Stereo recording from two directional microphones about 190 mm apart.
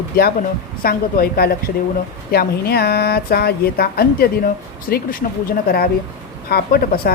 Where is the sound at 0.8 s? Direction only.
55° left (ahead or behind).